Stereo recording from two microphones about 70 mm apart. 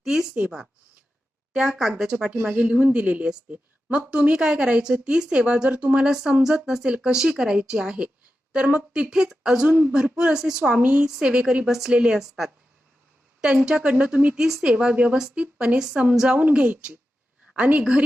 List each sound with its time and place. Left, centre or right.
0.0 s speech: centre
1.5 s a woman's voice: centre
6.1 s a woman's voice: centre